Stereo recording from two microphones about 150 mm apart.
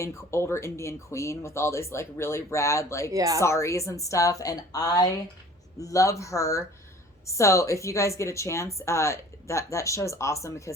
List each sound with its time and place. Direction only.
0.0 s speech: 20° left (ahead or behind)
3.1 s speech: 25° right (ahead or behind)
3.4 s speech: 20° left (ahead or behind)